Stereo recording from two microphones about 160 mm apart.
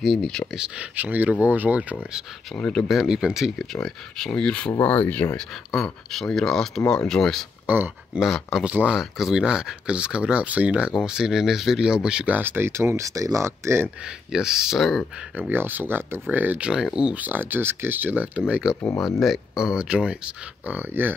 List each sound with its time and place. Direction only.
0.0 s speech: centre (ahead or behind)
2.5 s speech: 5° left (ahead or behind)
7.6 s speech: 10° right (ahead or behind)
14.3 s speech: 5° right (ahead or behind)
18.8 s speech: 15° left (ahead or behind)
19.2 s speech: 5° right (ahead or behind)